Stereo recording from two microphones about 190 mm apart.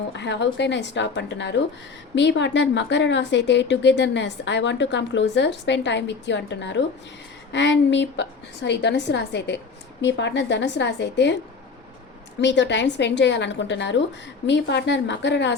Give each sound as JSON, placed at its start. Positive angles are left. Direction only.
{"t": 0.1, "sound": "speech", "side_deg": 70}
{"t": 12.4, "sound": "speech", "side_deg": 70}